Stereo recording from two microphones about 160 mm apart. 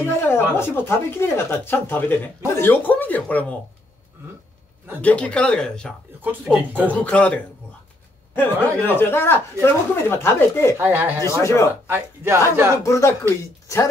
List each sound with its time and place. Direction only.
0.0 s speech: 15° left (ahead or behind)
5.0 s speech: 10° left (ahead or behind)
6.2 s speech: 10° right (ahead or behind)
6.9 s speech: 10° left (ahead or behind)
8.8 s speech: 15° left (ahead or behind)
10.8 s speech: 15° right (ahead or behind)
11.2 s speech: 20° left (ahead or behind)
11.9 s speech: 15° right (ahead or behind)
12.8 s speech: 20° left (ahead or behind)